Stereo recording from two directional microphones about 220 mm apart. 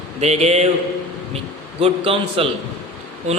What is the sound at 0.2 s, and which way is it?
Speech, 30° right (ahead or behind).